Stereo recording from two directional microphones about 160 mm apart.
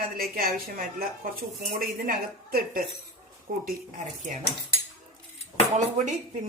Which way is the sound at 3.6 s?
55° right (ahead or behind).